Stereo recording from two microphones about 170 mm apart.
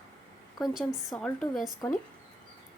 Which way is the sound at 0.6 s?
Centre (ahead or behind).